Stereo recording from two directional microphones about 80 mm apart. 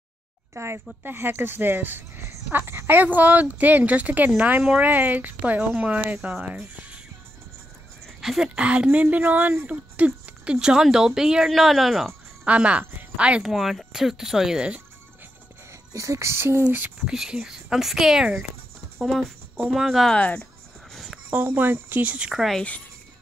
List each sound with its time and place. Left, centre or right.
0.6 s speech: right
1.0 s speech: right
8.2 s speech: centre
8.5 s speech: centre
12.4 s speech: centre
15.9 s speech: right
16.6 s speech: right
17.0 s speech: centre
20.1 s speech: centre
20.9 s a sound: centre
21.3 s speech: right